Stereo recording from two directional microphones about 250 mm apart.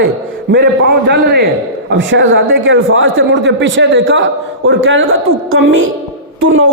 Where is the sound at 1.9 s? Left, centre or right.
Right.